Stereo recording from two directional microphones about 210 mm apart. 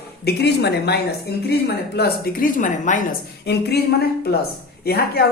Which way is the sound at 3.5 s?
50° left (ahead or behind).